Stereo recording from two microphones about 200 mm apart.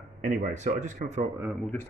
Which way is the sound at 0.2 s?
40° right (ahead or behind).